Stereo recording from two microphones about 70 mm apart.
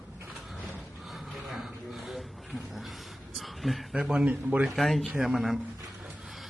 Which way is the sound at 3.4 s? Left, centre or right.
Centre.